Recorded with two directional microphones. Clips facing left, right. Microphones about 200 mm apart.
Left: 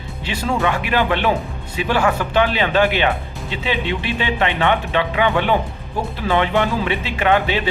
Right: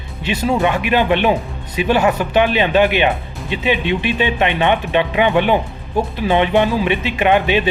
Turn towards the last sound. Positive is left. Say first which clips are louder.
# right 3 dB
turn(degrees=-20)  # may be behind; listen again after turning